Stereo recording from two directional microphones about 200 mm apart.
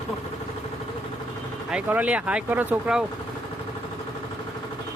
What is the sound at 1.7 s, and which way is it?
Speech, 5° right (ahead or behind).